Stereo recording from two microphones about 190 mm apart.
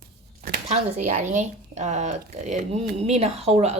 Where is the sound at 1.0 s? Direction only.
40° right (ahead or behind).